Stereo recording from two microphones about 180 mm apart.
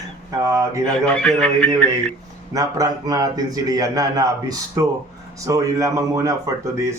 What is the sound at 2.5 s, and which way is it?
Speech, 20° right (ahead or behind).